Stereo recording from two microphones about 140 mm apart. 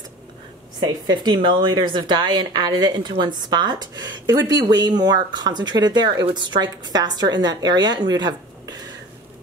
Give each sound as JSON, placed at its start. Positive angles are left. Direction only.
{"t": 1.0, "sound": "a woman's voice", "side_deg": -30}